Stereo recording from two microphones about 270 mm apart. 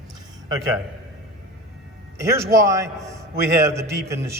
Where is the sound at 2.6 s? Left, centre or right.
Centre.